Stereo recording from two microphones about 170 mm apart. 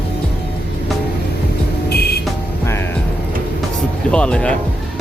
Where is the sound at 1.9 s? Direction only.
70° left (ahead or behind).